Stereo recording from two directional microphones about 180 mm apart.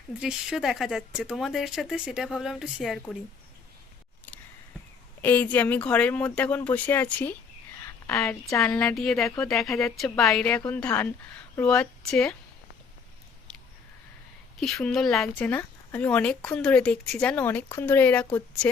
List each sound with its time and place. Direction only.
0.2 s speech: 5° right (ahead or behind)
5.2 s speech: 10° left (ahead or behind)
14.6 s speech: centre (ahead or behind)